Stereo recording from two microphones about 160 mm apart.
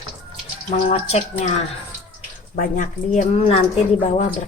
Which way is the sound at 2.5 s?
55° left (ahead or behind).